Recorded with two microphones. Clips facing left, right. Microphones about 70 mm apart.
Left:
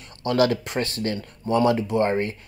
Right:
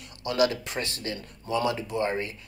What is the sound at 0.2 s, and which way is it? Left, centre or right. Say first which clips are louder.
Speech: left 4 dB; left.